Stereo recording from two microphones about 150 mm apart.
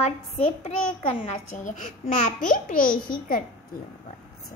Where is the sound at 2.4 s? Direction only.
70° left (ahead or behind).